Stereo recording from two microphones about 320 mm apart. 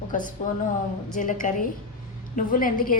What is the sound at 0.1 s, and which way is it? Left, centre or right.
A woman's voice, left.